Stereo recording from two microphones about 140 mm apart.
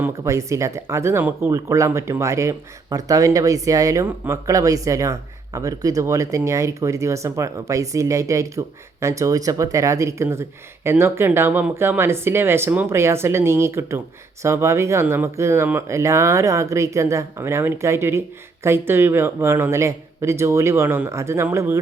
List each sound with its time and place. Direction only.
0.0 s speech: 20° right (ahead or behind)